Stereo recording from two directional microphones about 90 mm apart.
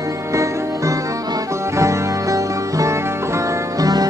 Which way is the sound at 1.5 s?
35° right (ahead or behind).